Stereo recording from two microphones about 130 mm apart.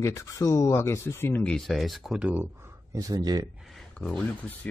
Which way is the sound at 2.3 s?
20° right (ahead or behind).